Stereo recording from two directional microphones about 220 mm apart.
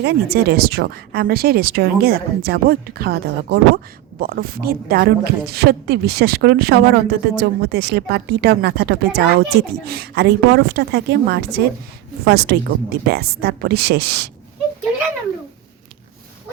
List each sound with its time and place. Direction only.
0.0 s a woman's voice: 45° right (ahead or behind)